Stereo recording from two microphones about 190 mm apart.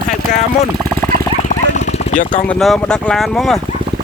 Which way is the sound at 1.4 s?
40° left (ahead or behind).